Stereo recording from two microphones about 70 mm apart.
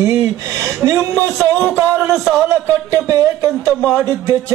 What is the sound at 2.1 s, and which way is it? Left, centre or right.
Speech, centre.